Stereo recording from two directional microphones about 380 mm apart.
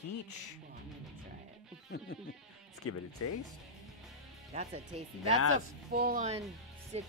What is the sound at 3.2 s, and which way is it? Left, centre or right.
Speech, left.